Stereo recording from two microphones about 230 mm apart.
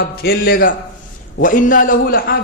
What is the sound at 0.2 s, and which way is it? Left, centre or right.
A man's voice, left.